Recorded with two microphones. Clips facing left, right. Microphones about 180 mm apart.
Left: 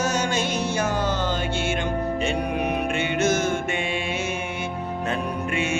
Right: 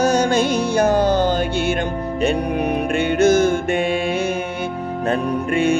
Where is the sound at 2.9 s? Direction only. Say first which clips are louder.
Right 10 dB; 40° right (ahead or behind).